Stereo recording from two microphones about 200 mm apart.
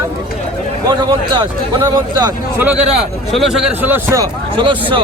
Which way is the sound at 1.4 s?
20° right (ahead or behind).